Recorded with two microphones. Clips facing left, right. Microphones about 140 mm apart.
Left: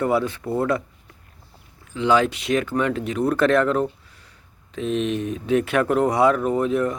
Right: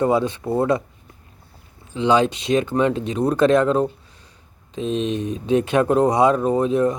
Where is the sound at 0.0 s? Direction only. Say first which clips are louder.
Right 2 dB; 20° right (ahead or behind).